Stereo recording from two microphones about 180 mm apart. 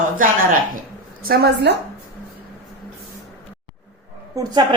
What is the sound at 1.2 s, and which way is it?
Speech, 60° right (ahead or behind).